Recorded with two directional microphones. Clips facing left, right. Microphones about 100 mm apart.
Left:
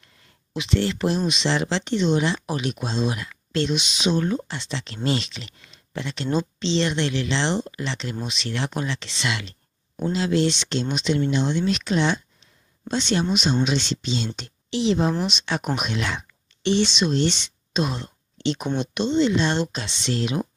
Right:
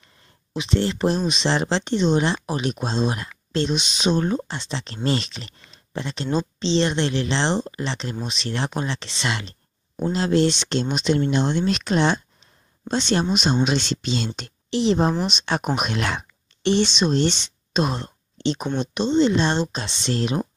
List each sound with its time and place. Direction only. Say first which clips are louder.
0.6 s speech: right 1 dB; 30° right (ahead or behind); by 14.5 s 55° right (ahead or behind)
14.7 s speech: right 2 dB; 40° right (ahead or behind)